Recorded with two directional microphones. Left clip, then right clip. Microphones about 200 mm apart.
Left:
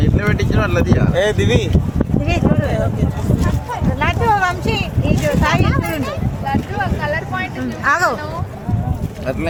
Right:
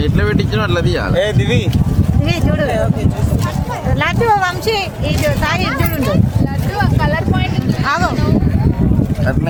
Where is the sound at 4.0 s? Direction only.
45° right (ahead or behind).